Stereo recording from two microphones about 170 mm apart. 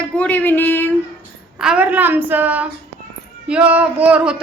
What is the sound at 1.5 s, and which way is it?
A woman's voice, 5° right (ahead or behind).